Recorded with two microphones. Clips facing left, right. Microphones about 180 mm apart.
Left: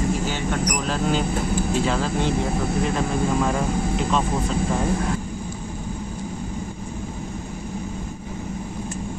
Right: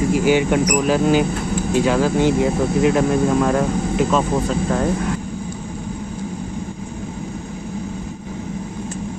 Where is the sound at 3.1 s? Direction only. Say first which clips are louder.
Right 6 dB; centre (ahead or behind).